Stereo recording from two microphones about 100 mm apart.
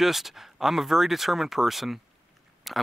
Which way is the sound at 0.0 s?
Centre (ahead or behind).